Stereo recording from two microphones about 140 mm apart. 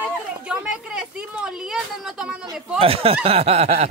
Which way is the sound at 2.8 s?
45° right (ahead or behind).